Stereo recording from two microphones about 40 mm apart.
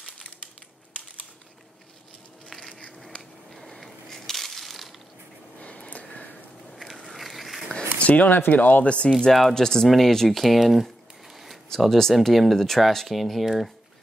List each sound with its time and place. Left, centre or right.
3.2 s crushing: centre
5.6 s a sound: left
6.7 s biting: centre
7.1 s a sound: centre
7.7 s a sound: left
8.2 s speech: left
8.8 s speech: left
9.5 s speech: centre
12.0 s speech: centre